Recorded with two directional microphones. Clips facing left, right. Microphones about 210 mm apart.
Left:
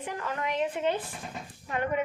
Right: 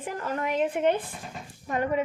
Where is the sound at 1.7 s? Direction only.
40° right (ahead or behind).